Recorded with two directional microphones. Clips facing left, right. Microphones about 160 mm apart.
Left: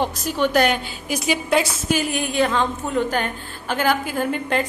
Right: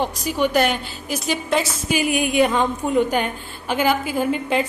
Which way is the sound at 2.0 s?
10° right (ahead or behind).